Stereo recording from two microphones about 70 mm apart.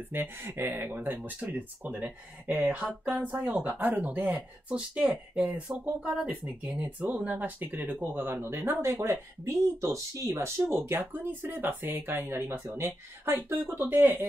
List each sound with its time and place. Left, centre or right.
0.1 s speech: right
1.1 s speech: centre; by 10.3 s right
10.3 s speech: right